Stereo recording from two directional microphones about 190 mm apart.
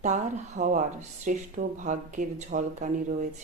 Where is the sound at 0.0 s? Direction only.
40° right (ahead or behind).